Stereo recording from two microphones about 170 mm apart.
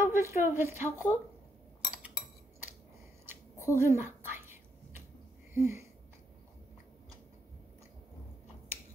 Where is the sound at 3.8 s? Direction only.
15° right (ahead or behind).